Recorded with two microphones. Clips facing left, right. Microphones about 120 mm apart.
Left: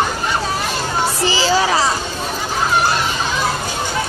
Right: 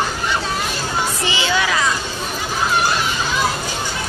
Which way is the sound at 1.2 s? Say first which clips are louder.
Left 6 dB; 35° left (ahead or behind).